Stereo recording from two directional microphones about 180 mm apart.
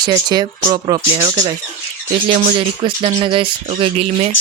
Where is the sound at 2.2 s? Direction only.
30° right (ahead or behind).